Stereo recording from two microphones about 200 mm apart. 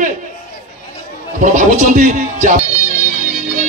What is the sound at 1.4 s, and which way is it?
Speech, 40° right (ahead or behind).